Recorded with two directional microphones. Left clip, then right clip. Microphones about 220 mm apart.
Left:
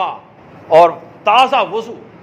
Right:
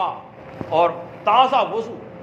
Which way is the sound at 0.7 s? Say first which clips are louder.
Left 9 dB; 55° left (ahead or behind).